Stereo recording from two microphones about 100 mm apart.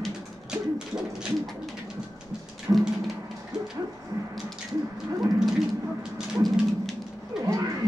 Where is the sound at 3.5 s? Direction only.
5° right (ahead or behind).